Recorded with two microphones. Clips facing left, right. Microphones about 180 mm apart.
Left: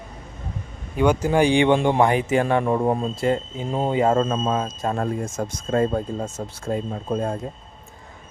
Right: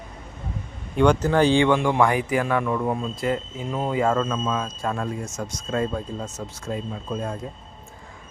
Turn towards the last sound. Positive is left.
turn(degrees=40)  # may be behind; listen again after turning